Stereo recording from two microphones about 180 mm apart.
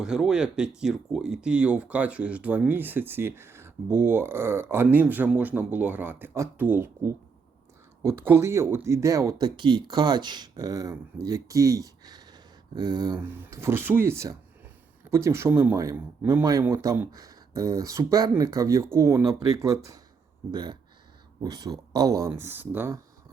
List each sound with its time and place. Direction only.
0.0 s speech: 5° right (ahead or behind); by 13.1 s 25° right (ahead or behind)
13.1 s speech: 10° right (ahead or behind)